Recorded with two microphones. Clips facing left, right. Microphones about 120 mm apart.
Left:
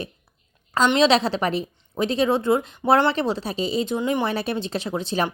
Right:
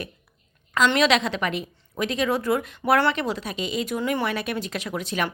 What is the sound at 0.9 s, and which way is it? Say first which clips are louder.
A woman's voice: left 3 dB; 25° left (ahead or behind).